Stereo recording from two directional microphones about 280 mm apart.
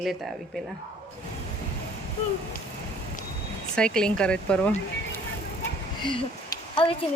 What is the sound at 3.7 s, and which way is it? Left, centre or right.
Speech, centre.